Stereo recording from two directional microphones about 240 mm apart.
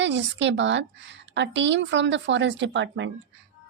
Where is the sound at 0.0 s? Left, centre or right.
Right.